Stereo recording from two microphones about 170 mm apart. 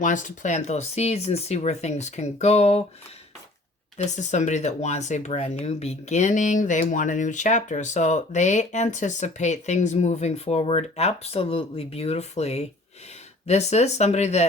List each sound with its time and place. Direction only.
0.0 s speech: 50° left (ahead or behind)
3.9 s speech: 45° left (ahead or behind)